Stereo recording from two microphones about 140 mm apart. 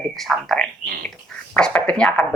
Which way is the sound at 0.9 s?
90° right.